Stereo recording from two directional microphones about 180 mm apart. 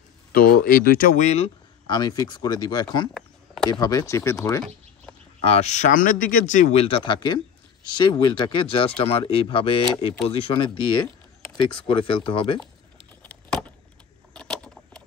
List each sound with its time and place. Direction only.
0.3 s speech: 55° left (ahead or behind); by 1.5 s 40° left (ahead or behind)
1.9 s speech: 25° left (ahead or behind)
3.2 s a sound: centre (ahead or behind)
3.8 s speech: 20° left (ahead or behind)
5.4 s speech: 35° left (ahead or behind)
13.2 s keys jangling: 5° left (ahead or behind)